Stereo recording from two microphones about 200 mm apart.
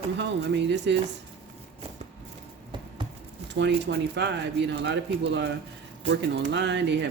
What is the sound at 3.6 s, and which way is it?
Speech, 60° right (ahead or behind).